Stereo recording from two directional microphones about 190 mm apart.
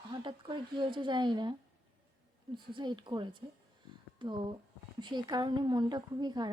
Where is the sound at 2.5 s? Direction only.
25° right (ahead or behind).